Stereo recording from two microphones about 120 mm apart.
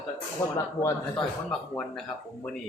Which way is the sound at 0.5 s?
25° left (ahead or behind).